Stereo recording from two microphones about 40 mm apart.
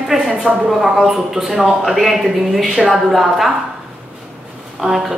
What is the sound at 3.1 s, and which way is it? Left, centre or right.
Speech, centre.